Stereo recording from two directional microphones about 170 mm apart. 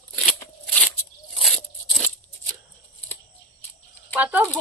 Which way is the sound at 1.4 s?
Centre (ahead or behind).